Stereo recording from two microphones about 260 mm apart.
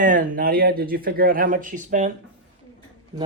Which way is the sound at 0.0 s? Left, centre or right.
Right.